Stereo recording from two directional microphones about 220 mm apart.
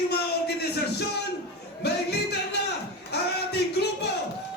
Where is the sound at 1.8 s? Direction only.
50° left (ahead or behind).